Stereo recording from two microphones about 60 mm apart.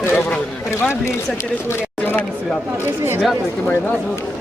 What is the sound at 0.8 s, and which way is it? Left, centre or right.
Speech, left.